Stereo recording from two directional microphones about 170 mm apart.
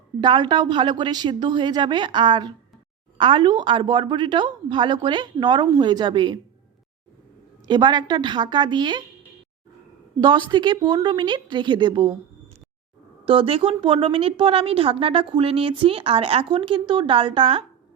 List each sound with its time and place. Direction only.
0.2 s a woman's voice: 25° right (ahead or behind)
7.7 s a woman's voice: 25° right (ahead or behind)
10.2 s a woman's voice: 25° right (ahead or behind)
13.2 s a woman's voice: 35° right (ahead or behind)